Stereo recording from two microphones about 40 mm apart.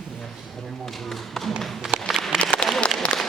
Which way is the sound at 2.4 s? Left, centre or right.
Left.